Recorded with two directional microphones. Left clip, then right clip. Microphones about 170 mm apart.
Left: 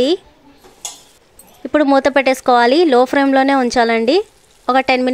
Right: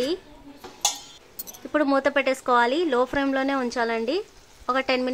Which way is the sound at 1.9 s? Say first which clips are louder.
Left 10 dB; 35° left (ahead or behind).